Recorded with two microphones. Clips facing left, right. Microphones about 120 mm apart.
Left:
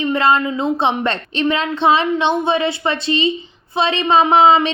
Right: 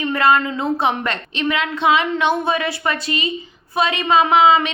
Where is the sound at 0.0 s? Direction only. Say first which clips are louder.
Left 1 dB; 25° left (ahead or behind).